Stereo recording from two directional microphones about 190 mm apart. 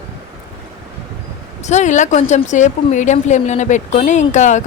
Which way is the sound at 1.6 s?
40° left (ahead or behind).